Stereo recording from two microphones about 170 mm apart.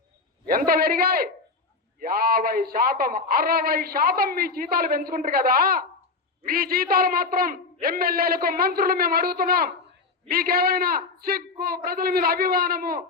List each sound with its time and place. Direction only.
0.4 s a man's voice: 60° right (ahead or behind)